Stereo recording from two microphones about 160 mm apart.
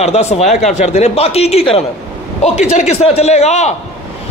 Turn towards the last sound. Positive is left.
turn(degrees=45)  # may be behind; listen again after turning